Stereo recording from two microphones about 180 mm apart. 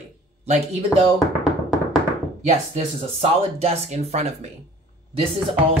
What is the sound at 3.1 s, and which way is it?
Speech, 35° right (ahead or behind).